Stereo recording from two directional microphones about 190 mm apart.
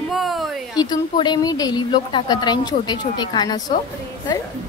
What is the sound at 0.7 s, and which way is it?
A woman's voice, 20° left (ahead or behind).